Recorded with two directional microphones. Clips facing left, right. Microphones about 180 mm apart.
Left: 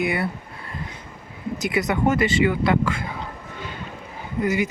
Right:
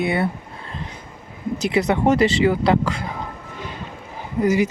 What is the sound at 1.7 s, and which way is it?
Speech, 35° right (ahead or behind).